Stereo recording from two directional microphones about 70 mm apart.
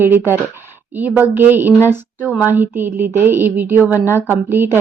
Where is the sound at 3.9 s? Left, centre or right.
Left.